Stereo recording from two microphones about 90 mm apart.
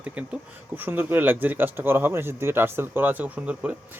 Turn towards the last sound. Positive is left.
turn(degrees=-15)  # may be behind; listen again after turning